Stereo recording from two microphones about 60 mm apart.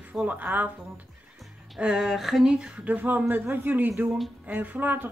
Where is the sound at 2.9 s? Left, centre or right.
Right.